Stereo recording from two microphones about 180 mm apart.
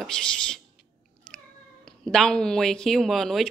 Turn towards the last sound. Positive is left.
turn(degrees=0)  # may be behind; listen again after turning